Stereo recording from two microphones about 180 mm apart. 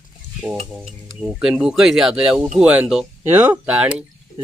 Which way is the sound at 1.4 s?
5° right (ahead or behind).